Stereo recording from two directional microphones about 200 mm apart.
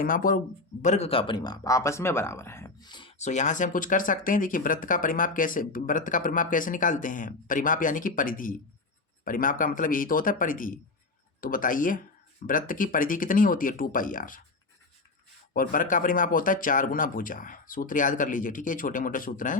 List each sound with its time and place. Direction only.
0.0 s speech: 45° left (ahead or behind)
0.8 s speech: 35° left (ahead or behind)
15.5 s speech: 45° left (ahead or behind)